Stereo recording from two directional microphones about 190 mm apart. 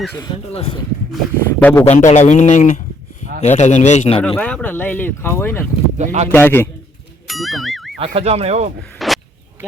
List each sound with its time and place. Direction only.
0.1 s speech: 20° left (ahead or behind)
0.5 s a man's voice: 30° left (ahead or behind)
1.1 s speech: 5° left (ahead or behind)
1.8 s a man's voice: 40° left (ahead or behind)
4.2 s speech: 5° left (ahead or behind)
6.0 s speech: 35° right (ahead or behind)
6.3 s speech: 10° left (ahead or behind)
7.3 s music: centre (ahead or behind)
7.9 s speech: 30° right (ahead or behind)
9.0 s a sound: centre (ahead or behind)